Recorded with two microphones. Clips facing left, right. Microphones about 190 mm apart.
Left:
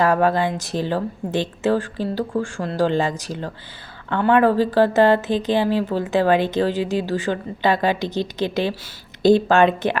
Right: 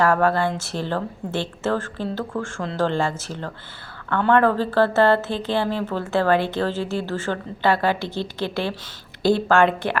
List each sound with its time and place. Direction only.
0.0 s speech: 15° left (ahead or behind)